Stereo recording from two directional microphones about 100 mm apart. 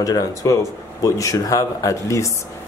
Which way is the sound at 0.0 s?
35° left (ahead or behind).